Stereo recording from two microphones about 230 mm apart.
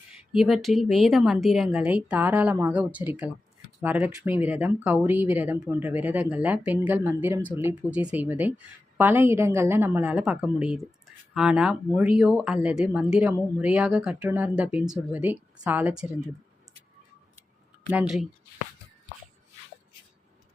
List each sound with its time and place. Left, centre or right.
0.3 s a woman's voice: centre
17.9 s a woman's voice: centre